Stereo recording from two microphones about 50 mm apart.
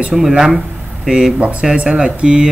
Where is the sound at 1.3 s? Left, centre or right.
Right.